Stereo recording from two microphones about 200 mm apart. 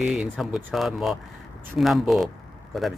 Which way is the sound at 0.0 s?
Centre (ahead or behind).